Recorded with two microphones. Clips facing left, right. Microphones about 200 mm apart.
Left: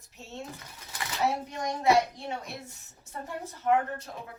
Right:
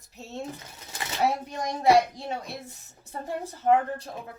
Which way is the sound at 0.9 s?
25° right (ahead or behind).